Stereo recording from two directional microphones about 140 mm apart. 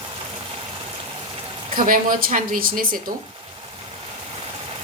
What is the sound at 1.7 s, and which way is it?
A woman's voice, 85° right.